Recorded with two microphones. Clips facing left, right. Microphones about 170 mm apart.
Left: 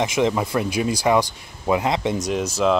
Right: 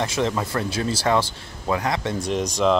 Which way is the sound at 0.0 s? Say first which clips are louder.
Left 3 dB; 15° left (ahead or behind).